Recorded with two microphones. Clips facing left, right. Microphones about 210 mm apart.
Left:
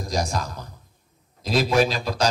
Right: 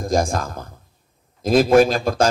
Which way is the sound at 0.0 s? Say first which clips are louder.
Right 6 dB; 50° right (ahead or behind).